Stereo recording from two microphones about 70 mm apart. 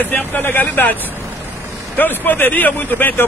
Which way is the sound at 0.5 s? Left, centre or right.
Left.